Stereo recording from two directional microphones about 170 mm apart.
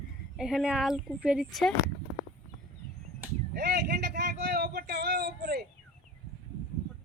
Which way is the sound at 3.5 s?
75° right (ahead or behind).